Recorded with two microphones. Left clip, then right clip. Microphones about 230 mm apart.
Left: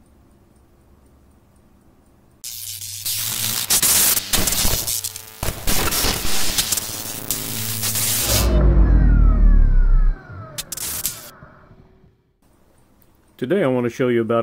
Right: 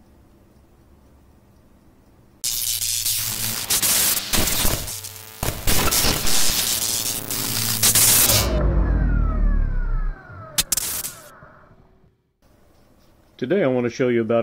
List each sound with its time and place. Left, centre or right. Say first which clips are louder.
2.4 s music: right 8 dB; centre
13.4 s speech: left 1 dB; left